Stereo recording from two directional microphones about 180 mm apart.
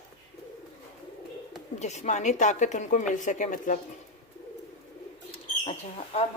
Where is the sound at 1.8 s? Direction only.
40° left (ahead or behind).